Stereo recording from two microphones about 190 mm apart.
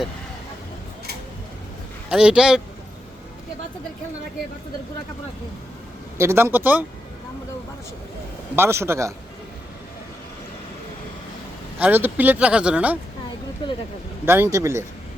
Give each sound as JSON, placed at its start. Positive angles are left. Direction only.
{"t": 2.0, "sound": "a man's voice", "side_deg": -5}
{"t": 6.1, "sound": "speech", "side_deg": -10}
{"t": 8.5, "sound": "speech", "side_deg": -15}
{"t": 11.8, "sound": "speech", "side_deg": -10}
{"t": 13.6, "sound": "speech", "side_deg": 25}
{"t": 14.3, "sound": "speech", "side_deg": -10}